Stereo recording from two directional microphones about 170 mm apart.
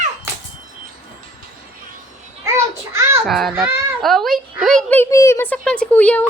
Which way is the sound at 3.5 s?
15° right (ahead or behind).